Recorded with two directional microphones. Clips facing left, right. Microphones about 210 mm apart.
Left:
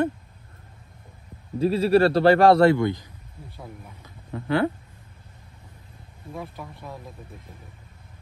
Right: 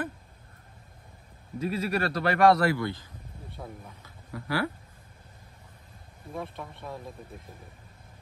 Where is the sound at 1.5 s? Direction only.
30° left (ahead or behind).